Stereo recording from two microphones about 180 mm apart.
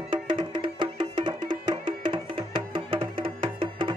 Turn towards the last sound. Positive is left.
turn(degrees=-30)  # may be behind; listen again after turning